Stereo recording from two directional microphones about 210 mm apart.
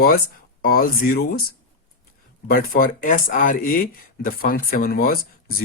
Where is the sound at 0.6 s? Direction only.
45° left (ahead or behind).